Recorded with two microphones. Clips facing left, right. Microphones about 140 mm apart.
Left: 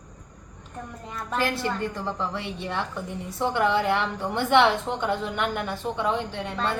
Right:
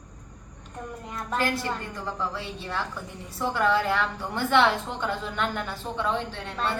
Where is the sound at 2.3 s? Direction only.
25° left (ahead or behind).